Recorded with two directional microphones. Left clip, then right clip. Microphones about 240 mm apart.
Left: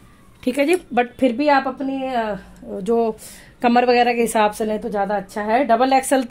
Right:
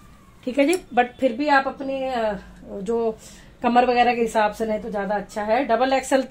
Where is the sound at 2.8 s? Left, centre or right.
Left.